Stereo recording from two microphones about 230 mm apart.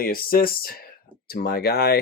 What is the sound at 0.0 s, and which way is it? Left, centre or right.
Speech, left.